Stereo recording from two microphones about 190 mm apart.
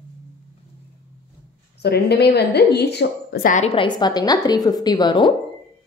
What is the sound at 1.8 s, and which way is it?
A woman's voice, 60° left (ahead or behind).